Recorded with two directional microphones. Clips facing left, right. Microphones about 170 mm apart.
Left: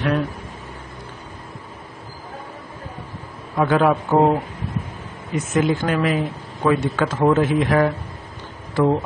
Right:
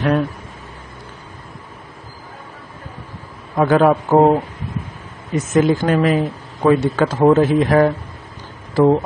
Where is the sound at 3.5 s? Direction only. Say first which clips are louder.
Right 4 dB; 40° right (ahead or behind).